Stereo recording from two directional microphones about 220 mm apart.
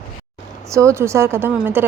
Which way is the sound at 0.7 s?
15° right (ahead or behind).